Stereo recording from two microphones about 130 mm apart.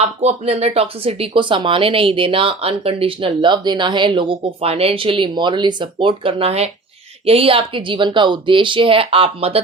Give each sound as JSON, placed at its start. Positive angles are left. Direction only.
{"t": 0.0, "sound": "speech", "side_deg": -55}